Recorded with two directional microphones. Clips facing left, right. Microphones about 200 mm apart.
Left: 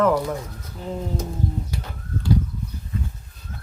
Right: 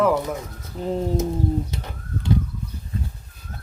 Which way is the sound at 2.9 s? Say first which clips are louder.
Left 1 dB; 30° right (ahead or behind).